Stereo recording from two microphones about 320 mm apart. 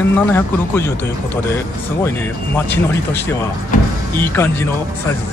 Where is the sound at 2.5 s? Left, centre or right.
Centre.